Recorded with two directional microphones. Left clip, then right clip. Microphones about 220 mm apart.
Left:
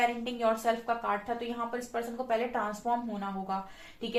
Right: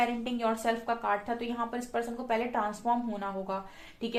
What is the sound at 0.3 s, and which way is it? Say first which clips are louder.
A woman's voice: even; 45° right (ahead or behind).